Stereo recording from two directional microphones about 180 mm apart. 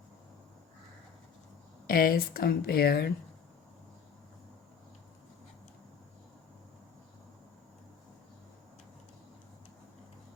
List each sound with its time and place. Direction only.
1.9 s speech: 55° left (ahead or behind)